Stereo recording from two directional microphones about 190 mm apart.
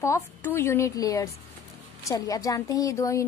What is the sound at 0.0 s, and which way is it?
A woman's voice, 15° left (ahead or behind).